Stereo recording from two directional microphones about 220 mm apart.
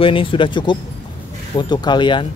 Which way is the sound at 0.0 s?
25° left (ahead or behind).